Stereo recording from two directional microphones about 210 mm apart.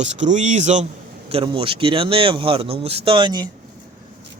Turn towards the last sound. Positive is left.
turn(degrees=-20)  # may be behind; listen again after turning